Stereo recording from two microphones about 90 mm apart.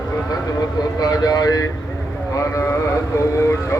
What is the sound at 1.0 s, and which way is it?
A man's voice, 45° left (ahead or behind).